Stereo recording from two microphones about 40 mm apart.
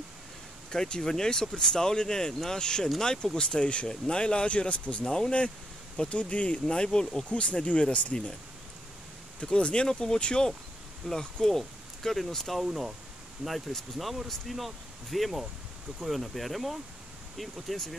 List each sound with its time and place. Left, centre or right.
0.7 s speech: left
5.0 s speech: centre
5.9 s speech: left
6.6 s speech: left
9.4 s speech: left; by 12.6 s centre
12.6 s speech: centre
13.4 s speech: centre